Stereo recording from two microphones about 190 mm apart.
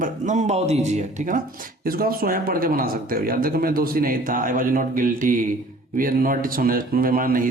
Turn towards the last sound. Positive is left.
turn(degrees=-50)  # may be behind; listen again after turning